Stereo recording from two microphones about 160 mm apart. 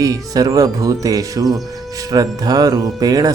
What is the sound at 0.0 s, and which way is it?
Speech, 20° right (ahead or behind).